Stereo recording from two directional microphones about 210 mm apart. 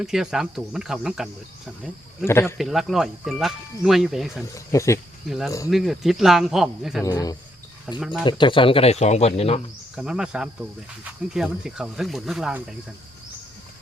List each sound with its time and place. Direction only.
0.0 s speech: centre (ahead or behind)
2.2 s speech: 10° left (ahead or behind)
2.6 s speech: centre (ahead or behind)
4.5 s speech: 15° left (ahead or behind)
5.7 s speech: centre (ahead or behind)
7.0 s speech: 15° left (ahead or behind)
7.9 s speech: centre (ahead or behind)
8.2 s speech: 20° left (ahead or behind)
9.9 s speech: 5° right (ahead or behind)